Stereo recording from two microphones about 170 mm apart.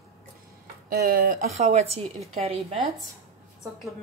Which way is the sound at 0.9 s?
60° right (ahead or behind).